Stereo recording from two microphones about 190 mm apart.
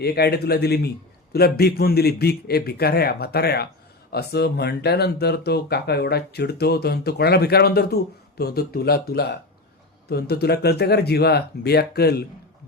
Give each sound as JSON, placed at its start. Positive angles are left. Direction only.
{"t": 0.0, "sound": "speech", "side_deg": 55}